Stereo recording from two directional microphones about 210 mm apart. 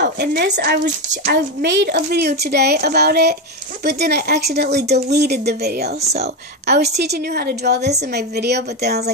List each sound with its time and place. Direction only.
0.0 s a woman's voice: 50° right (ahead or behind)